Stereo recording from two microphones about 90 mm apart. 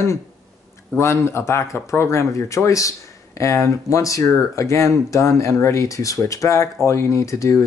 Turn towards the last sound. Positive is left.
turn(degrees=35)  # may be behind; listen again after turning